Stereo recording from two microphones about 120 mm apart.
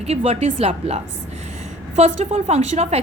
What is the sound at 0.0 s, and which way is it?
A woman's voice, 55° right (ahead or behind).